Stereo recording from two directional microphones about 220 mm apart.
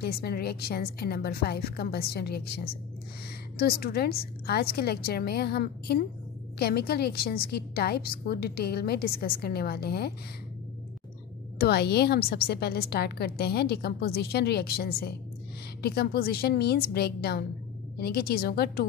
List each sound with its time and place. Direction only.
0.0 s a woman's voice: 45° left (ahead or behind)
11.5 s a woman's voice: 45° left (ahead or behind)